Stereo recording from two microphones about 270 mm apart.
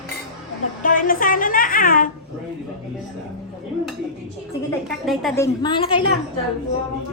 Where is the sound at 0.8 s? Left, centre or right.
Left.